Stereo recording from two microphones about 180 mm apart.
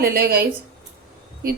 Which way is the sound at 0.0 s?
60° right (ahead or behind).